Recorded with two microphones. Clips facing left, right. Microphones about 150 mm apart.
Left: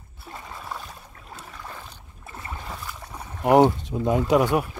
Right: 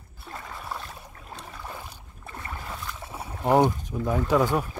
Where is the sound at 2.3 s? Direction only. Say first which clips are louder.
Left 1 dB; 25° left (ahead or behind).